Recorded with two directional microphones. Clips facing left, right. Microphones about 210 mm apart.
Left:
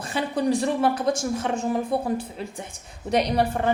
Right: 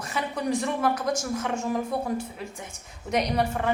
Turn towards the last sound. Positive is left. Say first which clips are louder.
# left 3 dB
turn(degrees=35)  # may be behind; listen again after turning